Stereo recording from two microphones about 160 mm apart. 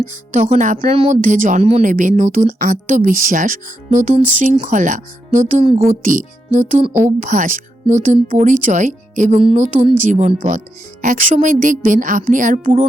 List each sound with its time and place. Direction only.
0.0 s speech: 50° right (ahead or behind)
0.9 s a woman's voice: 40° right (ahead or behind)
1.2 s a woman's voice: 50° right (ahead or behind)